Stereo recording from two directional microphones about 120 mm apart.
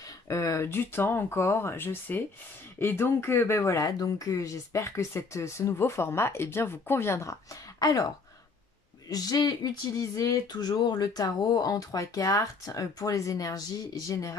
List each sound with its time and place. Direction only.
0.3 s speech: 25° left (ahead or behind)
9.1 s speech: 35° left (ahead or behind)